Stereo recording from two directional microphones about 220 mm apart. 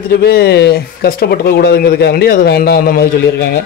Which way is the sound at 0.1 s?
45° left (ahead or behind).